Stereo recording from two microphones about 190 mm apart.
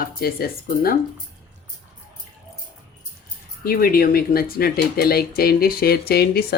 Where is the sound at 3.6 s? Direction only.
50° left (ahead or behind).